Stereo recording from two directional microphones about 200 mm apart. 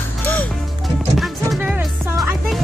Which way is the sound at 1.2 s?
5° right (ahead or behind).